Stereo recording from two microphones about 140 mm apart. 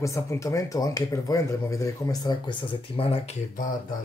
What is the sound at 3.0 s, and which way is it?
Speech, 45° left (ahead or behind).